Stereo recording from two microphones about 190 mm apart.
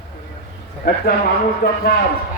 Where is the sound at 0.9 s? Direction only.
55° left (ahead or behind).